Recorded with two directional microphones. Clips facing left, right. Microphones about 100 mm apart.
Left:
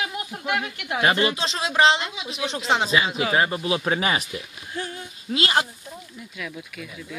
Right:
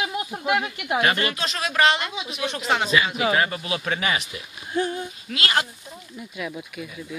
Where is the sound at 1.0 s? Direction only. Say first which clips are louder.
Left 2 dB; 25° left (ahead or behind).